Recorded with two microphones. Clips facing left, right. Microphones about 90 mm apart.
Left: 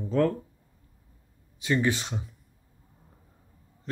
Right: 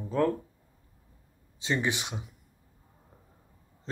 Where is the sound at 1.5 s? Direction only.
25° right (ahead or behind).